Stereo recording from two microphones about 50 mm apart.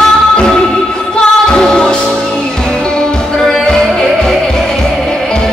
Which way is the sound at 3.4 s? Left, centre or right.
Centre.